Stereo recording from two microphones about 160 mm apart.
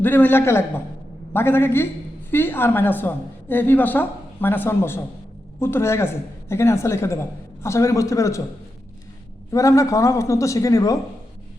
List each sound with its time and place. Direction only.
0.0 s a man's voice: 10° left (ahead or behind)
9.5 s a man's voice: 20° left (ahead or behind)